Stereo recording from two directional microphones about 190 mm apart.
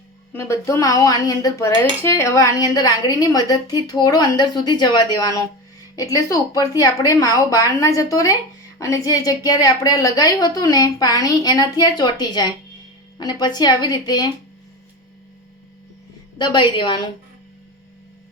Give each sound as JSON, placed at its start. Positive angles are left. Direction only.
{"t": 0.3, "sound": "a woman's voice", "side_deg": 15}
{"t": 16.4, "sound": "speech", "side_deg": 25}